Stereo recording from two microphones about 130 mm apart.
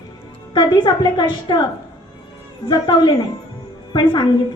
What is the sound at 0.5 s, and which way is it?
A woman's voice, 35° left (ahead or behind).